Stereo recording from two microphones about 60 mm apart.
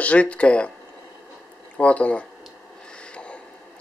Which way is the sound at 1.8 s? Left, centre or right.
Left.